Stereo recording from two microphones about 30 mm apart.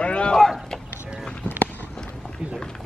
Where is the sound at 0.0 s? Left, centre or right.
Left.